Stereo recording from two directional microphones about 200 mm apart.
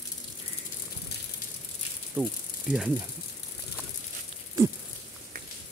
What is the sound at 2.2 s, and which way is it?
Speech, 10° right (ahead or behind).